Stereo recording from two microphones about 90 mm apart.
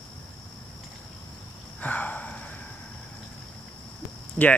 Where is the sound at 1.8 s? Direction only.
20° left (ahead or behind).